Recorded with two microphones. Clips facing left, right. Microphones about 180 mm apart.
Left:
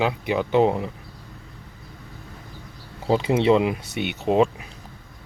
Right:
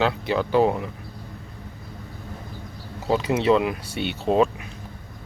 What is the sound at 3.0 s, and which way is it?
Speech, 25° left (ahead or behind).